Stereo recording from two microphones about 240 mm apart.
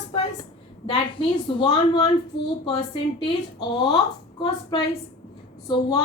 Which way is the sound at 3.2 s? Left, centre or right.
Centre.